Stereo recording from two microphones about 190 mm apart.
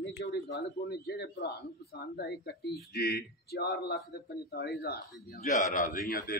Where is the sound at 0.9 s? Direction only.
55° left (ahead or behind).